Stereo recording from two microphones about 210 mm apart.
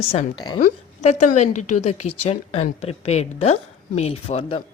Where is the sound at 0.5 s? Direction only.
35° left (ahead or behind).